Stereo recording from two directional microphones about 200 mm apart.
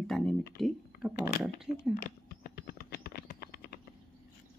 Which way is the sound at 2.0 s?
50° left (ahead or behind).